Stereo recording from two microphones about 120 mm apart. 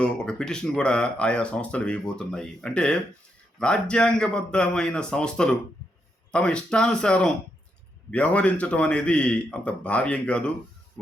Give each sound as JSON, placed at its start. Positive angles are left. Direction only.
{"t": 0.0, "sound": "speech", "side_deg": 5}